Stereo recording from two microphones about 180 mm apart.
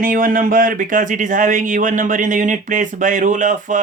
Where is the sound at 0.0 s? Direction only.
50° right (ahead or behind).